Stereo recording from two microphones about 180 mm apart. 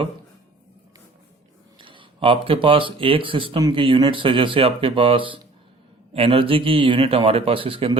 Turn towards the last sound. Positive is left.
turn(degrees=-30)  # may be behind; listen again after turning